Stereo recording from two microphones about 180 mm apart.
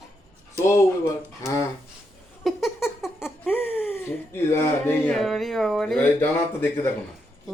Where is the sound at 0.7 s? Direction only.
15° left (ahead or behind).